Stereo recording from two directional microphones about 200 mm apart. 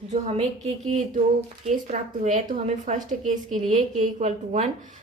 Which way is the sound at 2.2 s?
40° right (ahead or behind).